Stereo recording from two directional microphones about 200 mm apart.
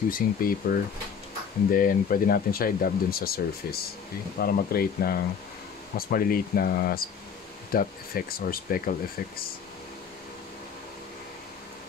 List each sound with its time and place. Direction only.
0.1 s speech: 45° left (ahead or behind)